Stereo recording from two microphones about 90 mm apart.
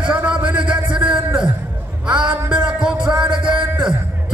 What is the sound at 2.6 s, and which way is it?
Music, 10° right (ahead or behind).